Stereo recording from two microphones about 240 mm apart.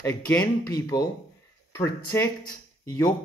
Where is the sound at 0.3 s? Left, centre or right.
Centre.